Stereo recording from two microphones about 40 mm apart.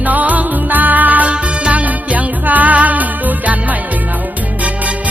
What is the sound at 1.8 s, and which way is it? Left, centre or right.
Music, right.